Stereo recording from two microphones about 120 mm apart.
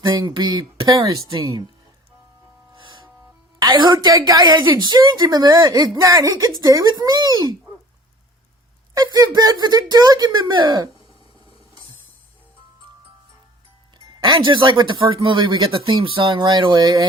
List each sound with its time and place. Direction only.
0.0 s speech: 35° right (ahead or behind)
2.7 s music: 40° right (ahead or behind)
3.6 s speech: 35° right (ahead or behind)
9.0 s speech: 30° right (ahead or behind)
14.2 s speech: 45° right (ahead or behind)